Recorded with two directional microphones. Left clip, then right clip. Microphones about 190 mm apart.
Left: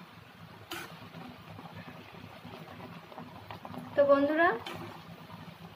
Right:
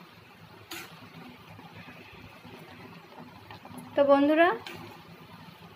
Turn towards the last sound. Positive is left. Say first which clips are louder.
# right 3 dB
turn(degrees=-15)  # may be behind; listen again after turning